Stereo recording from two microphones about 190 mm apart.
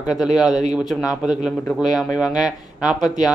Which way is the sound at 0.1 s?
Centre (ahead or behind).